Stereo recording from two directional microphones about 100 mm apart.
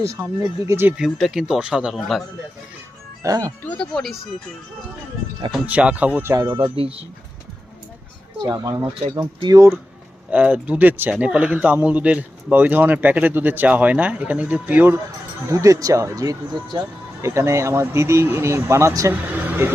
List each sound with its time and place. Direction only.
0.2 s speech: 20° right (ahead or behind)
0.9 s speech: 5° right (ahead or behind)
3.2 s speech: 35° right (ahead or behind)
3.6 s speech: 15° left (ahead or behind)
3.9 s speech: centre (ahead or behind)
5.6 s speech: 15° right (ahead or behind)
6.3 s speech: 35° right (ahead or behind)
6.6 s speech: 70° right (ahead or behind)
8.4 s speech: 40° right (ahead or behind)
10.3 s speech: 15° right (ahead or behind)
15.4 s speech: 35° right (ahead or behind)
19.5 s a sound: 20° right (ahead or behind)